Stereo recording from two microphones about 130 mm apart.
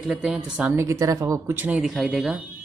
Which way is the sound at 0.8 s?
25° right (ahead or behind).